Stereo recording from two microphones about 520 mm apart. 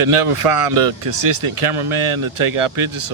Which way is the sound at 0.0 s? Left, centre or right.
Right.